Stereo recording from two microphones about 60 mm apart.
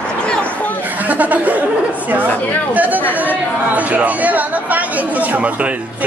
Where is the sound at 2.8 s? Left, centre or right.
Right.